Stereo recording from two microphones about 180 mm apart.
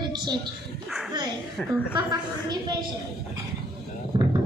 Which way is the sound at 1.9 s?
25° right (ahead or behind).